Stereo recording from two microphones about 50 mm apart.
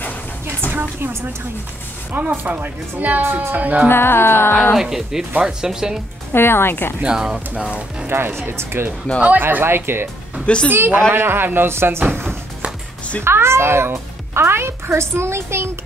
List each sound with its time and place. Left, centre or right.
2.2 s speech: right
3.2 s speech: right
3.5 s speech: right
3.9 s music: left
4.7 s speech: centre
6.3 s music: left
7.0 s speech: centre
8.1 s speech: right
9.1 s speech: left
9.4 s speech: right
10.4 s a woman's voice: centre
10.7 s speech: right